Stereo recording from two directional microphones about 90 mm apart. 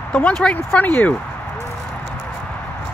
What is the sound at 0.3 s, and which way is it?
Speech, 5° left (ahead or behind).